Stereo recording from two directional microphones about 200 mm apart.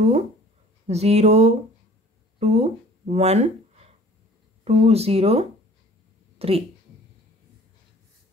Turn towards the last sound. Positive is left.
turn(degrees=-30)  # may be behind; listen again after turning